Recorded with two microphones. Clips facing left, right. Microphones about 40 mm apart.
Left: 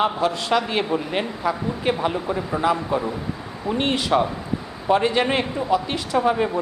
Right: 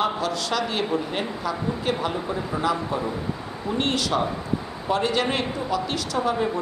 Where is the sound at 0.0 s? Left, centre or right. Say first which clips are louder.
Left 3 dB; left.